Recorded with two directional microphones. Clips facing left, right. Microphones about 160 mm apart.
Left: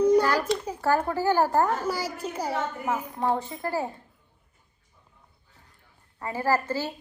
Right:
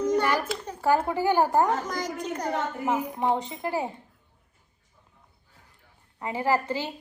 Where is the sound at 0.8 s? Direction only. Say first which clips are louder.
Right 4 dB; 15° right (ahead or behind).